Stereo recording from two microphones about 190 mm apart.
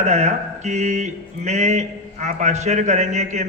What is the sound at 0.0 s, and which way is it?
Mantra, 35° right (ahead or behind).